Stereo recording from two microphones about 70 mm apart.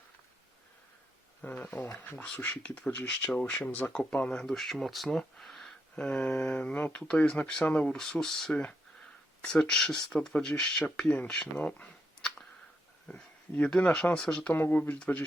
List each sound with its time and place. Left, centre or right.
1.4 s speech: left
3.9 s speech: centre
6.1 s speech: centre
14.5 s speech: left
14.8 s speech: centre